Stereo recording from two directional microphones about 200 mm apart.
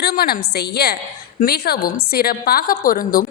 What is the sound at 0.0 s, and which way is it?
A woman's voice, 50° left (ahead or behind).